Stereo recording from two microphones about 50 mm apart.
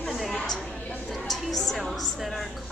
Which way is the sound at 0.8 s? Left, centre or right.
Left.